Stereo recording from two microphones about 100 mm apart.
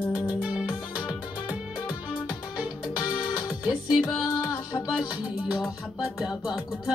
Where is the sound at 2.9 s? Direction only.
35° left (ahead or behind).